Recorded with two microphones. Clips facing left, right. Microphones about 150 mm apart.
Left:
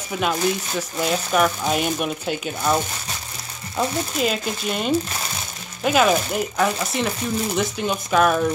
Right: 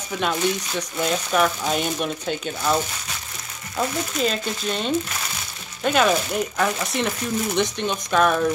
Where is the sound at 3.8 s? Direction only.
10° left (ahead or behind).